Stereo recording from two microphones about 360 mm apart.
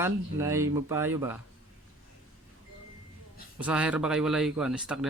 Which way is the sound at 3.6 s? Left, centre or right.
Centre.